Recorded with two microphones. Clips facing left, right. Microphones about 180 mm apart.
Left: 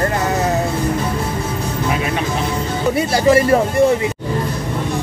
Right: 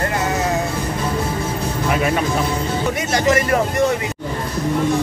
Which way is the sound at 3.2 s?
30° left (ahead or behind).